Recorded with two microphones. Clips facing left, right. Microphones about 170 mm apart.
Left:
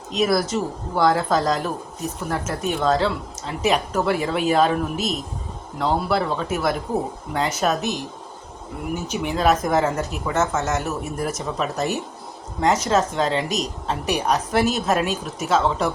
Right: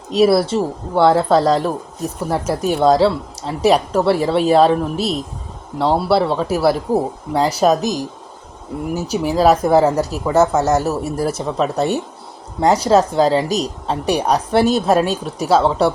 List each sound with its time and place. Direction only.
0.1 s a woman's voice: 30° right (ahead or behind)